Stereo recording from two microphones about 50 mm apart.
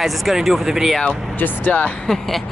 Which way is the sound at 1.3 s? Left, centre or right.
Left.